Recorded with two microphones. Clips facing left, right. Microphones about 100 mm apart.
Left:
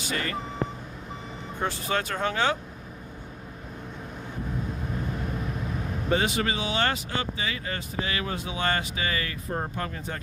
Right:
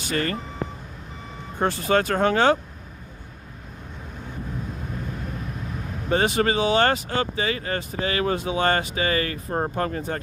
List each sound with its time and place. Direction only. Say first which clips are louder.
0.0 s speech: right 5 dB; 50° right (ahead or behind)
1.5 s speech: right 7 dB; 50° right (ahead or behind)
6.1 s speech: right 7 dB; 45° right (ahead or behind)